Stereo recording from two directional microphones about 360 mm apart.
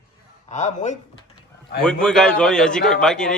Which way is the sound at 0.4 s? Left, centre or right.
Centre.